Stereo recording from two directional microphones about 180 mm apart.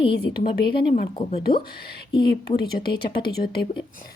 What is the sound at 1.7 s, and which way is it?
Speech, 60° left (ahead or behind).